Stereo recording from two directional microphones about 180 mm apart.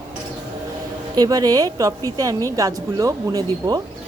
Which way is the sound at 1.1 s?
20° right (ahead or behind).